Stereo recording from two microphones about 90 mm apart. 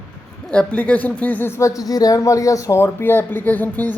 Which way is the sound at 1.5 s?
35° left (ahead or behind).